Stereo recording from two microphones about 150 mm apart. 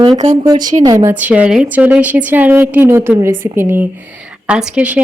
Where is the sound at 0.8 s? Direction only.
25° right (ahead or behind).